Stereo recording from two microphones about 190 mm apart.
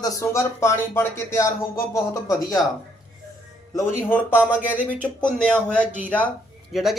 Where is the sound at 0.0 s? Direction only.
15° left (ahead or behind).